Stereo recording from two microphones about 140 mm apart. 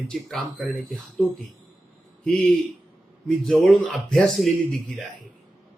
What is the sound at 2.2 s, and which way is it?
Speech, centre (ahead or behind).